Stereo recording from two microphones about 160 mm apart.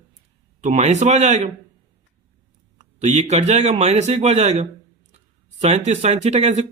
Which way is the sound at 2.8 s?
45° right (ahead or behind).